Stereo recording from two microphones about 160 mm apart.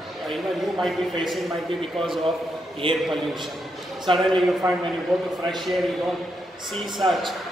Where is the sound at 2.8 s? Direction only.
30° right (ahead or behind).